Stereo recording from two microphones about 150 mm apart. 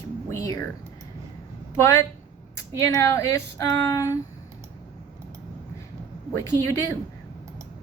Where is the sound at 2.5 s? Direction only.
20° left (ahead or behind).